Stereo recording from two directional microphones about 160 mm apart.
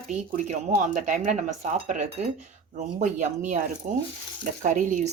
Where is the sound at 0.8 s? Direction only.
50° right (ahead or behind).